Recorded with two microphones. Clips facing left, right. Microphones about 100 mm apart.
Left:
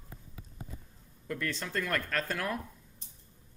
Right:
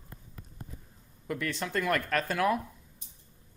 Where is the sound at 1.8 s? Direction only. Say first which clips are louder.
Right 5 dB; 70° right (ahead or behind).